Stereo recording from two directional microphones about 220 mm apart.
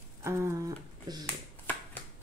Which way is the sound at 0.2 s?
10° right (ahead or behind).